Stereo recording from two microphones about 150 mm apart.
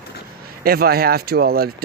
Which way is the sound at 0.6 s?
90° right.